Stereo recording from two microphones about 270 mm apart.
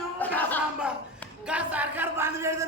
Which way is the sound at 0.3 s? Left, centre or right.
Centre.